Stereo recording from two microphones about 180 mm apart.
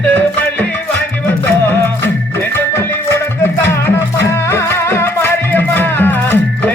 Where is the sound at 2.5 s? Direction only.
15° left (ahead or behind).